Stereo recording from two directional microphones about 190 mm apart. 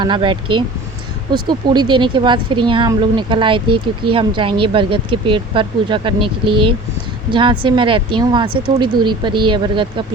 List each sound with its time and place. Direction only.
0.0 s speech: 25° right (ahead or behind)